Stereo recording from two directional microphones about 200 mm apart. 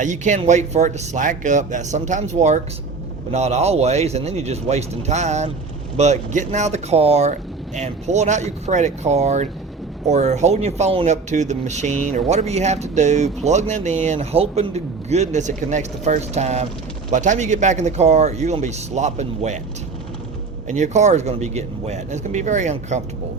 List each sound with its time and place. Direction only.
0.0 s speech: 40° right (ahead or behind)
20.7 s speech: 35° right (ahead or behind)